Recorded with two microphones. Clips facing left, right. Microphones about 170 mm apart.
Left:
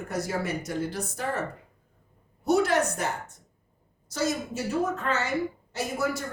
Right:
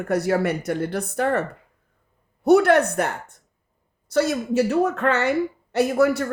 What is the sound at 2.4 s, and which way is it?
A woman's voice, 65° right (ahead or behind).